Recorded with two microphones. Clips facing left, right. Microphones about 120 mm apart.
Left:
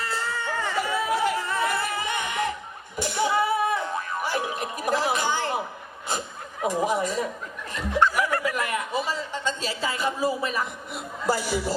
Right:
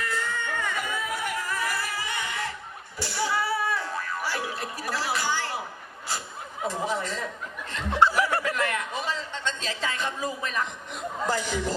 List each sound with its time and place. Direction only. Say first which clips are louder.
0.0 s a sound: left 1 dB; 30° left (ahead or behind)
6.1 s chuckle: left 3 dB; 15° left (ahead or behind)
8.4 s a man's voice: left 1 dB; 10° left (ahead or behind)